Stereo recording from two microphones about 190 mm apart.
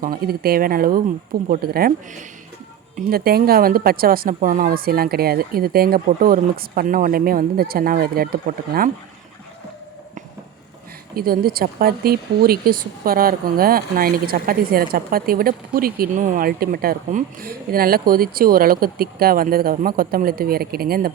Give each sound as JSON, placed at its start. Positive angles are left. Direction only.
{"t": 0.0, "sound": "speech", "side_deg": -50}
{"t": 11.1, "sound": "speech", "side_deg": -50}